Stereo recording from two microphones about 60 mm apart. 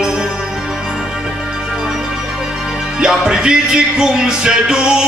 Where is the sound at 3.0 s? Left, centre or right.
Centre.